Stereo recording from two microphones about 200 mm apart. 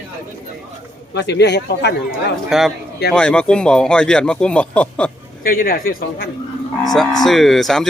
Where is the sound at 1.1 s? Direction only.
60° left (ahead or behind).